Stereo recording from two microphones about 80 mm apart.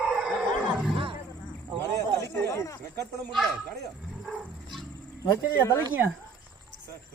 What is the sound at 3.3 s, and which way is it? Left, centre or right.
Speech, centre.